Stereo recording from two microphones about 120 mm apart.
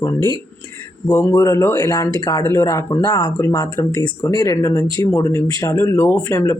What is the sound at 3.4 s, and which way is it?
Speech, 25° left (ahead or behind).